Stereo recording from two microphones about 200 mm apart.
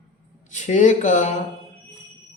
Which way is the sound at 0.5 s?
35° left (ahead or behind).